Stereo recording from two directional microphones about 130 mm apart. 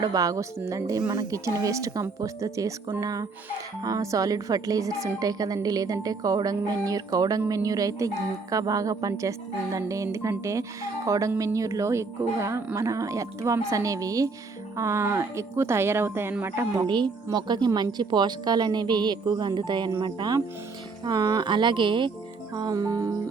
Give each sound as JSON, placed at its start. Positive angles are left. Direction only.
{"t": 0.0, "sound": "a woman's voice", "side_deg": -25}
{"t": 16.8, "sound": "a woman's voice", "side_deg": -35}